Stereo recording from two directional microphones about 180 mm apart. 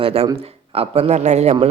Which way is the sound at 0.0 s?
30° right (ahead or behind).